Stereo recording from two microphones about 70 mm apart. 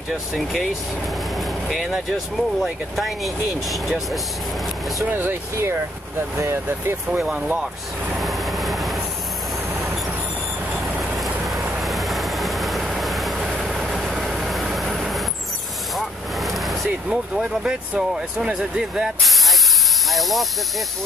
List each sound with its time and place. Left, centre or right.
0.1 s speech: centre
1.7 s speech: centre
5.1 s speech: right
7.1 s speech: centre
8.2 s train: centre
11.1 s vehicle: centre
16.0 s speech: centre
20.1 s hiss: centre